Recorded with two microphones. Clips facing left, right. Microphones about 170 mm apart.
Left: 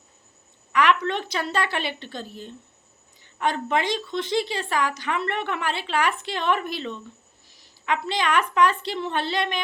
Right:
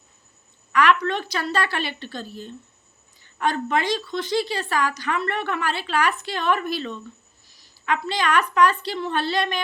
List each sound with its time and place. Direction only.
0.7 s a woman's voice: 20° left (ahead or behind)